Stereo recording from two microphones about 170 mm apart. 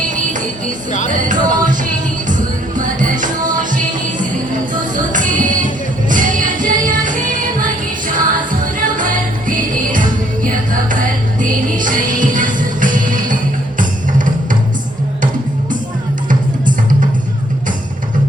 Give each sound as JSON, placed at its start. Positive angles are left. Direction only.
{"t": 1.1, "sound": "music", "side_deg": -50}
{"t": 16.3, "sound": "music", "side_deg": -50}